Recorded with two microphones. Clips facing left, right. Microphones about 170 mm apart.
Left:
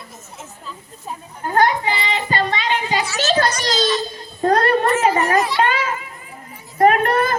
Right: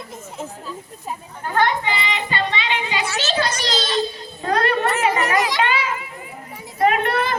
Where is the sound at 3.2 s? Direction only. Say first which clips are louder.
Left 6 dB; 45° left (ahead or behind).